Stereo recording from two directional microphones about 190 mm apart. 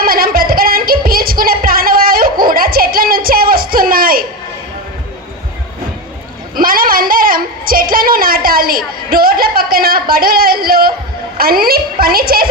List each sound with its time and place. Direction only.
0.0 s music: 50° right (ahead or behind)
6.6 s a sound: 50° right (ahead or behind)
11.3 s a woman's voice: 50° right (ahead or behind)